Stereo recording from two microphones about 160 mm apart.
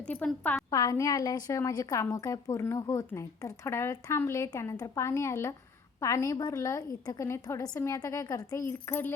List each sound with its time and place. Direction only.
0.0 s a woman's voice: 10° left (ahead or behind)
0.7 s a woman's voice: 20° left (ahead or behind)